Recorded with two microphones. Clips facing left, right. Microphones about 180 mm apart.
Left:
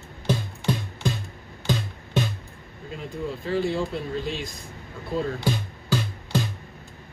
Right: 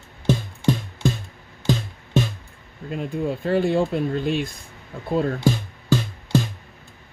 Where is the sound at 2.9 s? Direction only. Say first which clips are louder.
Right 6 dB; 55° right (ahead or behind).